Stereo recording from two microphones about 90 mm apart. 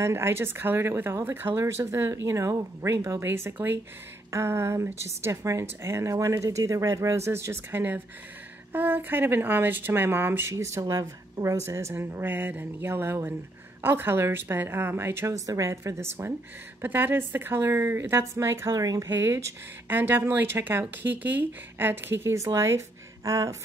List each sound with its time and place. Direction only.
0.0 s a woman's voice: 30° right (ahead or behind)
19.0 s speech: 25° right (ahead or behind)